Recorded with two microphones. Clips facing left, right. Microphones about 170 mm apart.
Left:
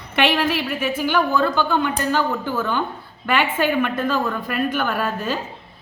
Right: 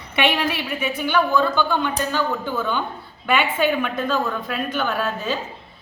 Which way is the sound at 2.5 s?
5° left (ahead or behind).